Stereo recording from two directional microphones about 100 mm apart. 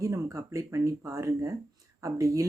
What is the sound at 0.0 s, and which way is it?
Speech, 30° right (ahead or behind).